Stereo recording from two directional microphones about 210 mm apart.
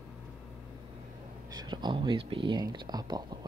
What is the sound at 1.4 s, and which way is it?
Speech, 20° right (ahead or behind).